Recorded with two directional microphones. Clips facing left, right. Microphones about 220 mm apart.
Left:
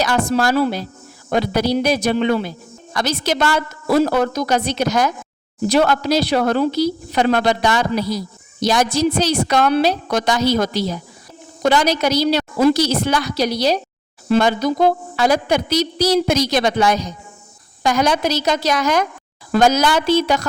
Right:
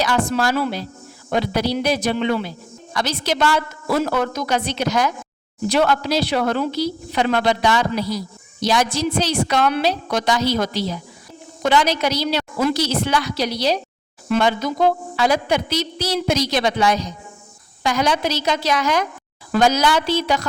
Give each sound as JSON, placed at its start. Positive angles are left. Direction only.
{"t": 0.0, "sound": "a woman's voice", "side_deg": 45}